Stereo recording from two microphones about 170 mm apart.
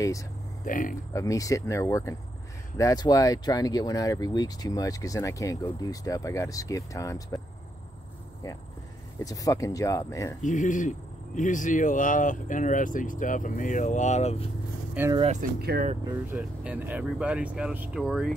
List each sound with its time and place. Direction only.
0.7 s speech: 50° left (ahead or behind)
1.1 s speech: 20° left (ahead or behind)
9.2 s speech: 20° left (ahead or behind)
10.4 s speech: 45° left (ahead or behind)
15.0 s speech: 10° right (ahead or behind)
15.6 s speech: 65° right (ahead or behind)
16.3 s speech: 10° right (ahead or behind)